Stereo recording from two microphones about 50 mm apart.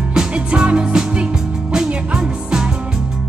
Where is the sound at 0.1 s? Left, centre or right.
Centre.